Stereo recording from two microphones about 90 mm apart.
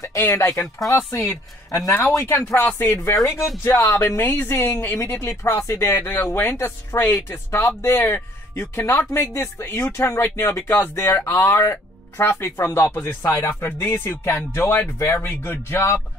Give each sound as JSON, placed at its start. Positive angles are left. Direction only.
{"t": 0.0, "sound": "speech", "side_deg": 30}
{"t": 13.2, "sound": "speech", "side_deg": 40}
{"t": 13.5, "sound": "speech", "side_deg": 25}